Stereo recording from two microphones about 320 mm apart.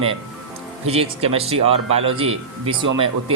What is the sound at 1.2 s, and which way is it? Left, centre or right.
Speech, centre.